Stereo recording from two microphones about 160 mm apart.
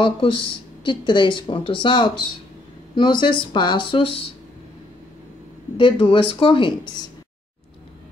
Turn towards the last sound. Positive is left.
turn(degrees=30)  # may be behind; listen again after turning